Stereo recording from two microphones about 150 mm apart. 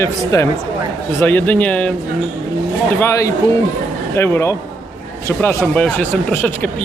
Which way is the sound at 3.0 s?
20° left (ahead or behind).